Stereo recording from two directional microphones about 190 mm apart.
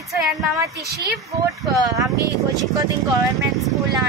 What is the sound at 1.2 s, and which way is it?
Speech, 15° right (ahead or behind).